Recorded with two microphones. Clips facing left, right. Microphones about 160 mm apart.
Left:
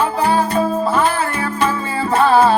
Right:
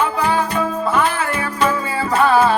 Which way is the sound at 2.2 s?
30° left (ahead or behind).